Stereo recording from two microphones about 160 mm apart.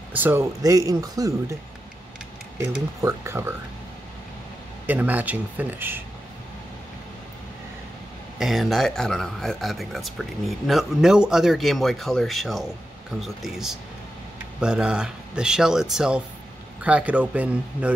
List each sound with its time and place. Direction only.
0.1 s speech: 10° right (ahead or behind)
3.0 s speech: 15° right (ahead or behind)
4.8 s speech: 10° right (ahead or behind)
8.4 s speech: centre (ahead or behind)